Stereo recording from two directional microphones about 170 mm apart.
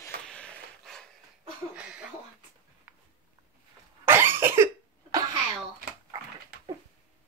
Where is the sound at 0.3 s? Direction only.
5° left (ahead or behind).